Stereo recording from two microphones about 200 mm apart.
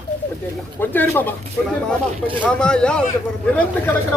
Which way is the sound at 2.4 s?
5° left (ahead or behind).